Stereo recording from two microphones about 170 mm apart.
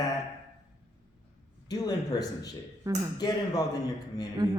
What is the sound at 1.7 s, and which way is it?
Speech, 20° left (ahead or behind).